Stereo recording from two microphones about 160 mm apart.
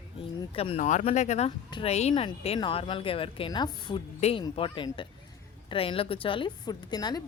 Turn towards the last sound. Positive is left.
turn(degrees=25)  # may be behind; listen again after turning